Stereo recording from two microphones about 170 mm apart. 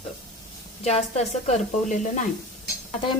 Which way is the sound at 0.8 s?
40° left (ahead or behind).